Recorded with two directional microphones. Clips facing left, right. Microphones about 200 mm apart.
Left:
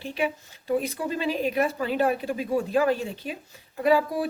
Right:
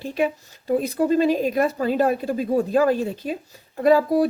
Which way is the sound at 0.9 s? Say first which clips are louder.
Right 9 dB; 40° right (ahead or behind).